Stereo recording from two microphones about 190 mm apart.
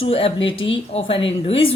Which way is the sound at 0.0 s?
30° left (ahead or behind).